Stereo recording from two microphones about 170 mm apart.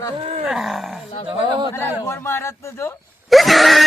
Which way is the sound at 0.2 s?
40° right (ahead or behind).